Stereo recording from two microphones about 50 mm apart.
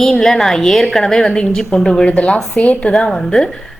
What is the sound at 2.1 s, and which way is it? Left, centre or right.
Speech, left.